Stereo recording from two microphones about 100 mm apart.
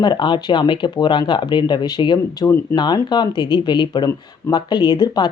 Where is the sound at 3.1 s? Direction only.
45° left (ahead or behind).